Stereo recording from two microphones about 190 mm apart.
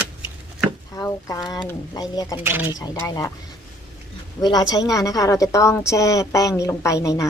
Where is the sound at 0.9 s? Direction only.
20° left (ahead or behind).